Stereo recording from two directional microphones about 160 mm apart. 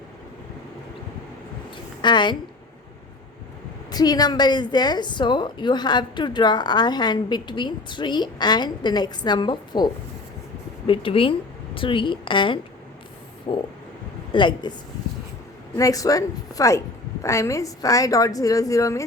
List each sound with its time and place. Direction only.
2.0 s a woman's voice: 30° left (ahead or behind)
3.9 s a woman's voice: 25° left (ahead or behind)
13.5 s vehicle: 35° left (ahead or behind)
14.3 s a woman's voice: 30° left (ahead or behind)
15.7 s a woman's voice: 20° left (ahead or behind)